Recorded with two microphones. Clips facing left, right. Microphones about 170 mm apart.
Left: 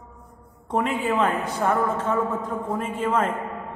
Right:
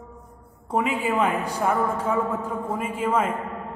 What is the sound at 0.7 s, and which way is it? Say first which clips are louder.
A woman's voice: even; 5° right (ahead or behind).